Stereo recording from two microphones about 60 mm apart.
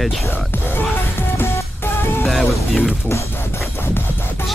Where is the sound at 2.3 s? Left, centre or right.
Centre.